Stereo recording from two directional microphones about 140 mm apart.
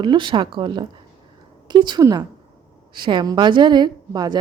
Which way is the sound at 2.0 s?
25° right (ahead or behind).